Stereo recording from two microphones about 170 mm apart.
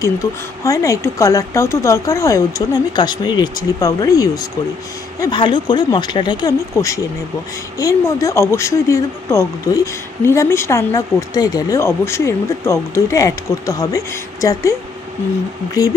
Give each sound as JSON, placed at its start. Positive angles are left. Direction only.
{"t": 0.0, "sound": "speech", "side_deg": 20}